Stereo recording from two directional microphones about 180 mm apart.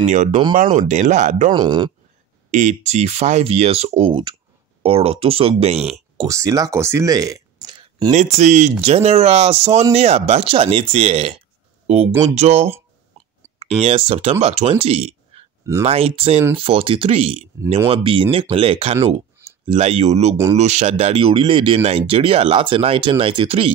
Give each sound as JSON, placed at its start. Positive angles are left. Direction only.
{"t": 0.1, "sound": "speech", "side_deg": -45}
{"t": 1.5, "sound": "speech", "side_deg": -25}
{"t": 2.5, "sound": "speech", "side_deg": -40}
{"t": 5.8, "sound": "speech", "side_deg": 0}
{"t": 6.2, "sound": "speech", "side_deg": -20}
{"t": 8.1, "sound": "speech", "side_deg": -40}